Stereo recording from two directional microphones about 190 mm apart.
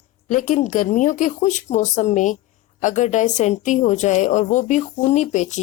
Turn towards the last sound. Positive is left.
turn(degrees=40)  # may be behind; listen again after turning